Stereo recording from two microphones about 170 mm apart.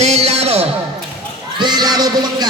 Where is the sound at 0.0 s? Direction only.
40° right (ahead or behind).